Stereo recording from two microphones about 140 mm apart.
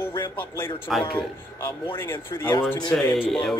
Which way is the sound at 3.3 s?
5° left (ahead or behind).